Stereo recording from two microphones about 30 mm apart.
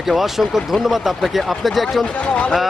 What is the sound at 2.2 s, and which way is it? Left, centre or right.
Speech, left.